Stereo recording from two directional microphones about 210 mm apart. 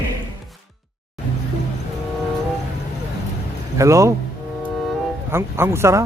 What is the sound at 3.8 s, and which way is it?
Speech, 15° right (ahead or behind).